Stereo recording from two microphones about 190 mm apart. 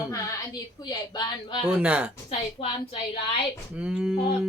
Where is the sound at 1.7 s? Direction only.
5° right (ahead or behind).